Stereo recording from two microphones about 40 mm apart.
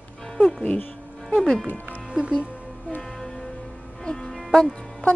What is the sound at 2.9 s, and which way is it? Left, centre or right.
Music, centre.